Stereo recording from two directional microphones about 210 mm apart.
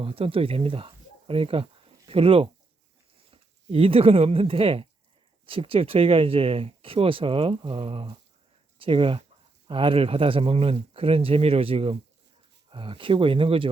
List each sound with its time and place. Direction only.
0.0 s speech: 25° right (ahead or behind)